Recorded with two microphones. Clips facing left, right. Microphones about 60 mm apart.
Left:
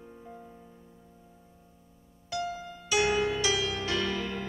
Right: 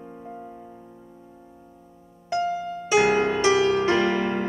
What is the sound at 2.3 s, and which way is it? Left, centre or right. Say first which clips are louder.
Music: right 9 dB; right.